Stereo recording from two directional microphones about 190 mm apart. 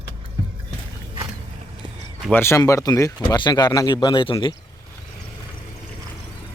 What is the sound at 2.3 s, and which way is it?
Speech, 15° left (ahead or behind).